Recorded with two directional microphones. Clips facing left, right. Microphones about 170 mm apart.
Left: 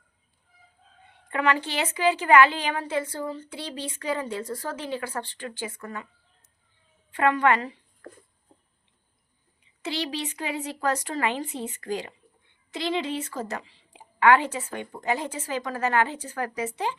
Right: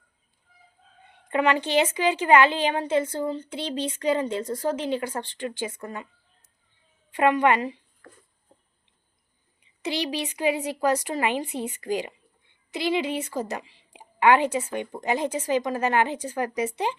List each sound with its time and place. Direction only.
1.3 s a woman's voice: 20° right (ahead or behind)
7.1 s a woman's voice: 15° right (ahead or behind)
9.8 s a woman's voice: 15° right (ahead or behind)